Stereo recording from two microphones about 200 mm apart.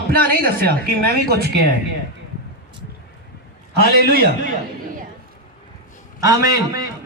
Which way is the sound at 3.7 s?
55° right (ahead or behind).